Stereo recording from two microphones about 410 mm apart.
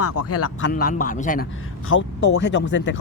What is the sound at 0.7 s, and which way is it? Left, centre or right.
Speech, left.